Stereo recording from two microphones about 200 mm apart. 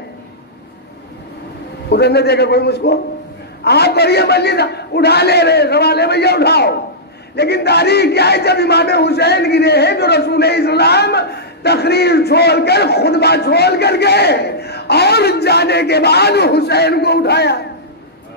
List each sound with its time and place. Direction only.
1.9 s speech: 55° left (ahead or behind)